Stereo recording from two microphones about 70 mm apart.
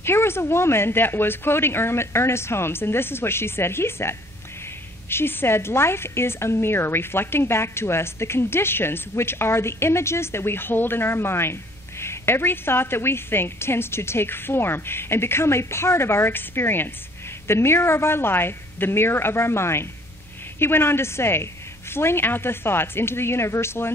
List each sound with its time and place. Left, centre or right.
0.0 s a woman's voice: left